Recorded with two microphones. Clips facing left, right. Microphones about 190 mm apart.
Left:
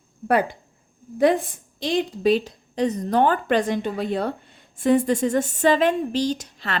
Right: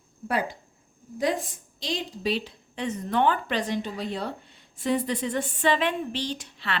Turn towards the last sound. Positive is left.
turn(degrees=40)  # may be behind; listen again after turning